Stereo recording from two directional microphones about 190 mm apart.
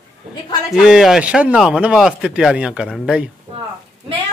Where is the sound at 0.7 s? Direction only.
Centre (ahead or behind).